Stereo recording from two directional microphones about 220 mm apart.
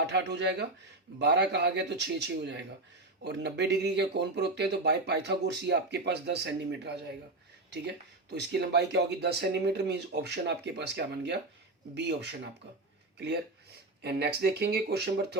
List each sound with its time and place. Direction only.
0.1 s speech: 50° right (ahead or behind)
8.3 s speech: 50° right (ahead or behind)
14.0 s speech: 50° right (ahead or behind)